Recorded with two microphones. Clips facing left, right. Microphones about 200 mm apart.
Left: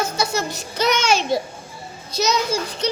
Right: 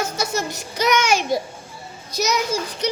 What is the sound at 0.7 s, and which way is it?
A child's voice, 15° right (ahead or behind).